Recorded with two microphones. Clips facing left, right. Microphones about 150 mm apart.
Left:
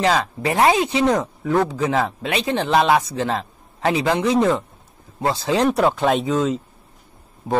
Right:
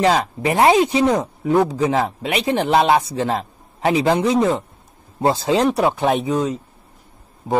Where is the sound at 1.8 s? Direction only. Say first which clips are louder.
Right 2 dB; 30° right (ahead or behind).